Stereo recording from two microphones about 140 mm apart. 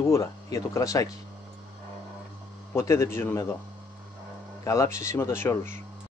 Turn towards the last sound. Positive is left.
turn(degrees=20)  # may be behind; listen again after turning